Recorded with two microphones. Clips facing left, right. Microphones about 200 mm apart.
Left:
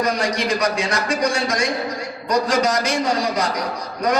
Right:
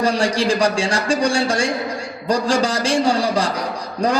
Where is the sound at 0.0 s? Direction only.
30° right (ahead or behind).